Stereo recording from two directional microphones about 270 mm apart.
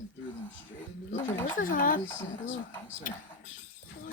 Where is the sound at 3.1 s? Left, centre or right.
Left.